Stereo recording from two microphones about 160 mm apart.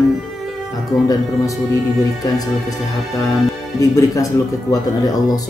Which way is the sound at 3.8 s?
20° left (ahead or behind).